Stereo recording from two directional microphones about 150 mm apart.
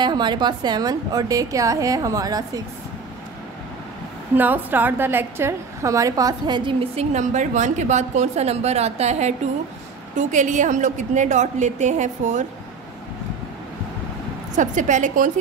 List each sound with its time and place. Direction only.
0.0 s a woman's voice: 30° right (ahead or behind)
4.4 s a woman's voice: 10° right (ahead or behind); by 12.4 s 55° right (ahead or behind)
14.5 s a woman's voice: 55° right (ahead or behind)